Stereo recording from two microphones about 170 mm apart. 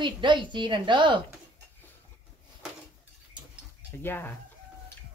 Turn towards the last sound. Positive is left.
turn(degrees=10)  # may be behind; listen again after turning